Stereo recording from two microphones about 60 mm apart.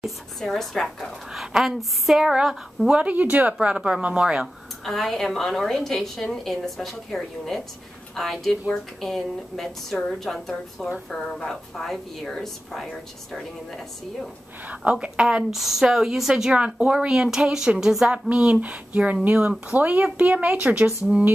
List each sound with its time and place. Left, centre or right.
0.0 s a woman's voice: centre
1.3 s a woman's voice: centre
3.0 s a woman's voice: right
4.8 s a woman's voice: centre
14.9 s a woman's voice: centre
15.5 s a woman's voice: centre
16.5 s a woman's voice: centre